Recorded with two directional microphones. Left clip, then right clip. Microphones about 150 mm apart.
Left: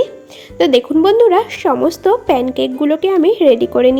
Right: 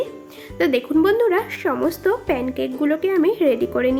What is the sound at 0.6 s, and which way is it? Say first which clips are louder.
A woman's voice: left 7 dB; 20° left (ahead or behind).